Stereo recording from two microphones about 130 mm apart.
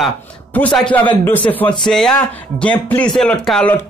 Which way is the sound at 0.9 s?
15° left (ahead or behind).